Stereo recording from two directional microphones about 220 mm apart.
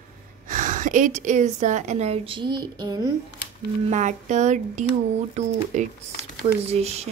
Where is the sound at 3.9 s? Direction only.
35° right (ahead or behind).